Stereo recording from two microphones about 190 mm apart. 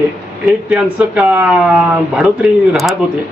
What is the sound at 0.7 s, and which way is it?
Speech, 5° right (ahead or behind).